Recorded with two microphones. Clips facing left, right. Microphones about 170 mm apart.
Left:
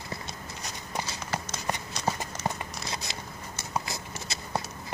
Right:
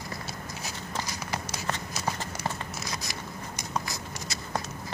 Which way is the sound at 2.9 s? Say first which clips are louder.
Even; 25° left (ahead or behind).